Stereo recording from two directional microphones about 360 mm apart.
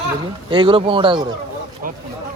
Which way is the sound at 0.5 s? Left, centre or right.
Centre.